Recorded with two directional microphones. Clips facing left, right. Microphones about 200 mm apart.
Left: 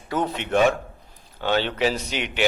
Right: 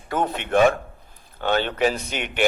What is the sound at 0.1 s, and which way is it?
A man's voice, 50° right (ahead or behind).